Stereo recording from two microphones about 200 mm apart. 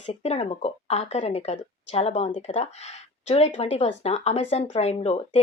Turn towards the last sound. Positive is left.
turn(degrees=30)  # may be behind; listen again after turning